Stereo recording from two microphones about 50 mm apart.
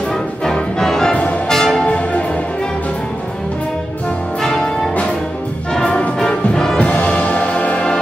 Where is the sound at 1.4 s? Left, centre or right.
Centre.